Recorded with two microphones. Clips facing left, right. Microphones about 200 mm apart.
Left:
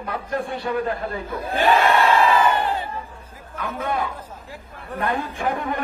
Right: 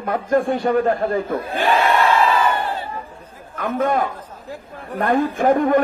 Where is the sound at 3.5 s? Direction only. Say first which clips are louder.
Right 6 dB; 50° right (ahead or behind).